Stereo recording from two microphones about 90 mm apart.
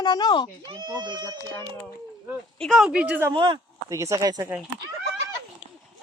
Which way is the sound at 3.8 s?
35° right (ahead or behind).